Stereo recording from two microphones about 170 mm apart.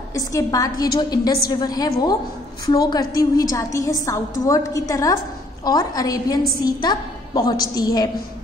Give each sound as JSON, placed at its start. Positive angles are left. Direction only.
{"t": 0.1, "sound": "a woman's voice", "side_deg": 20}